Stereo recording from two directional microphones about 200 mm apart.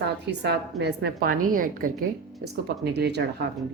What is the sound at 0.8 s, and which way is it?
A woman's voice, 55° right (ahead or behind).